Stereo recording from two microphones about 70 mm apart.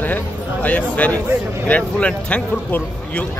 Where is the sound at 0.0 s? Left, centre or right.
Left.